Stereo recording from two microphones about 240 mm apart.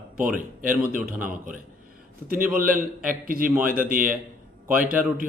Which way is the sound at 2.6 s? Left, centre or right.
Right.